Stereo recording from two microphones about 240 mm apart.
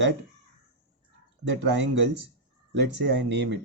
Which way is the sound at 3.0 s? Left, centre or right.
Right.